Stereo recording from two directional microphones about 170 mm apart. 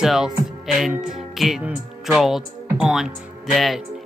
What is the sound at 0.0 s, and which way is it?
Speech, centre (ahead or behind).